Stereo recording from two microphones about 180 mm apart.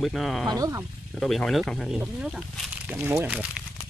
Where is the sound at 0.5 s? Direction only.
20° right (ahead or behind).